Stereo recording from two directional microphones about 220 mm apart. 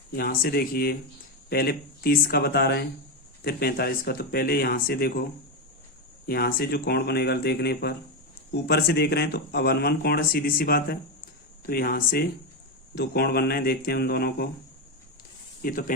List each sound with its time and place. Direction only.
0.2 s speech: 45° left (ahead or behind)
6.2 s speech: 45° left (ahead or behind)
15.6 s speech: 40° left (ahead or behind)